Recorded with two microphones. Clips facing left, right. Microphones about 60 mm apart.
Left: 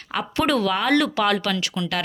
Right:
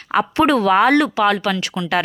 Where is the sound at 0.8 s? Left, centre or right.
Right.